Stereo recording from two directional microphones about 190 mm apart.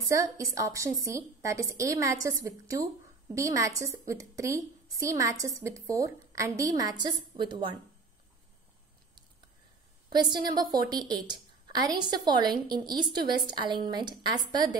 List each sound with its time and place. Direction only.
0.1 s a woman's voice: 15° right (ahead or behind)
10.1 s a woman's voice: 20° right (ahead or behind)